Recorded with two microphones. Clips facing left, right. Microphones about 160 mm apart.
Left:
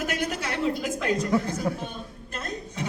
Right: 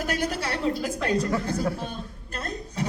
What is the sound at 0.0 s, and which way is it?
Speech, 35° right (ahead or behind).